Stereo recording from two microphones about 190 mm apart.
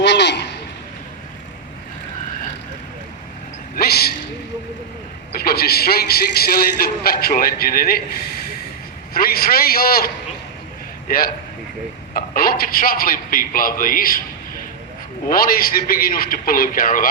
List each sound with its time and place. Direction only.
0.0 s a sound: 65° left (ahead or behind)
3.8 s a sound: 55° left (ahead or behind)
5.4 s a man's voice: 55° left (ahead or behind)
9.1 s a man's voice: 50° left (ahead or behind)
11.1 s a man's voice: 50° left (ahead or behind)
15.3 s a man's voice: 50° left (ahead or behind)